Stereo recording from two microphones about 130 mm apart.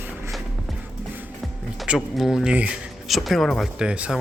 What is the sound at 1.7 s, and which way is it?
Speech, 5° right (ahead or behind).